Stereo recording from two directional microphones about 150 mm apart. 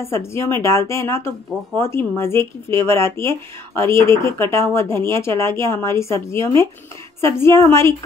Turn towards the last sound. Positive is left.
turn(degrees=15)  # may be behind; listen again after turning